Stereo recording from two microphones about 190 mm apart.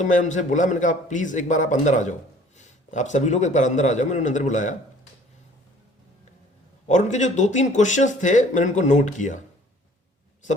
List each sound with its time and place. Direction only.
0.0 s speech: 40° left (ahead or behind)
6.8 s speech: 40° left (ahead or behind)